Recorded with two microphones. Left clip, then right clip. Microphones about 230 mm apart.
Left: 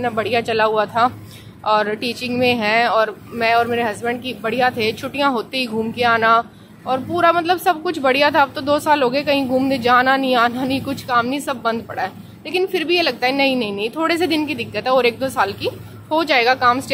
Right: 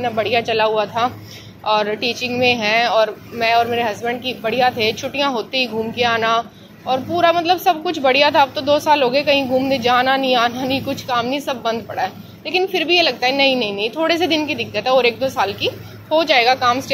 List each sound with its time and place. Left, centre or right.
0.0 s speech: left